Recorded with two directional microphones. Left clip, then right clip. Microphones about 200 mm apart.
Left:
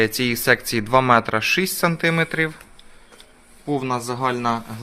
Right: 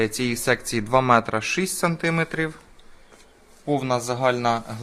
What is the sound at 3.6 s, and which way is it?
Speech, 20° right (ahead or behind).